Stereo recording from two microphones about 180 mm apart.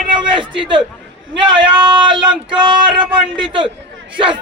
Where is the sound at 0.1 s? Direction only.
25° right (ahead or behind).